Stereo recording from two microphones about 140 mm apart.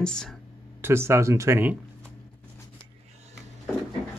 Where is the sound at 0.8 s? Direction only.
20° right (ahead or behind).